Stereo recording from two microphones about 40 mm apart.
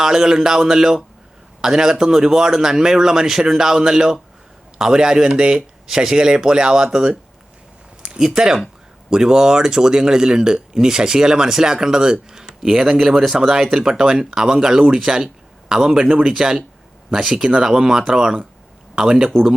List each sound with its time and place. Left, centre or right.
0.0 s a man's voice: centre
12.3 s a sound: centre
12.7 s a man's voice: centre